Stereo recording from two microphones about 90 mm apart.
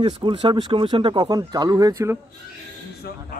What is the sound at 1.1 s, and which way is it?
Speech, 50° right (ahead or behind).